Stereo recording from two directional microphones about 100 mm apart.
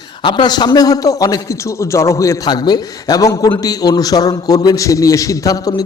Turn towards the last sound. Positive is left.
turn(degrees=35)  # may be behind; listen again after turning